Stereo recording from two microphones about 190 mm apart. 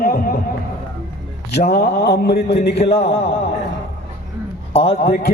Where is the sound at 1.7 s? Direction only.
60° left (ahead or behind).